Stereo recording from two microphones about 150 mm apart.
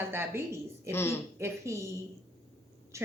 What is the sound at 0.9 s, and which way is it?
Speech, 15° left (ahead or behind).